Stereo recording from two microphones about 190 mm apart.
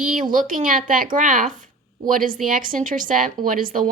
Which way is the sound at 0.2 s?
45° right (ahead or behind).